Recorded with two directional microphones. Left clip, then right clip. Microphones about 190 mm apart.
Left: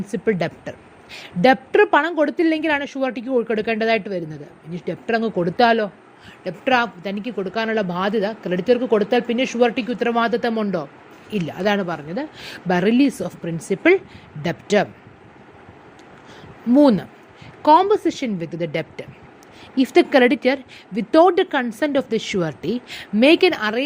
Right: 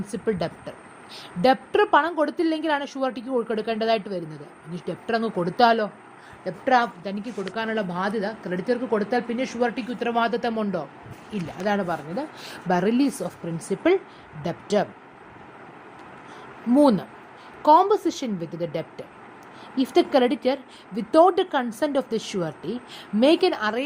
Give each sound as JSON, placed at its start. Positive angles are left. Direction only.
{"t": 0.0, "sound": "a woman's voice", "side_deg": 30}
{"t": 6.4, "sound": "a woman's voice", "side_deg": 40}
{"t": 16.7, "sound": "a woman's voice", "side_deg": 30}